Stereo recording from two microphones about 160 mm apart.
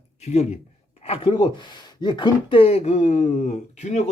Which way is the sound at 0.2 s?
45° left (ahead or behind).